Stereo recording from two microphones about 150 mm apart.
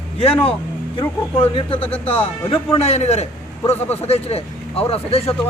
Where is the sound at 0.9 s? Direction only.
35° left (ahead or behind).